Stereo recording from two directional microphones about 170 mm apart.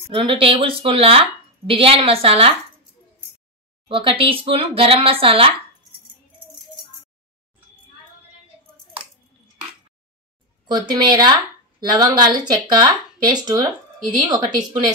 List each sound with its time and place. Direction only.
0.1 s speech: 30° right (ahead or behind)
3.9 s speech: 30° right (ahead or behind)
10.9 s speech: 25° right (ahead or behind)